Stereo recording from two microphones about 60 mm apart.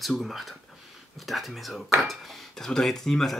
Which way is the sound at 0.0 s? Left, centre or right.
Centre.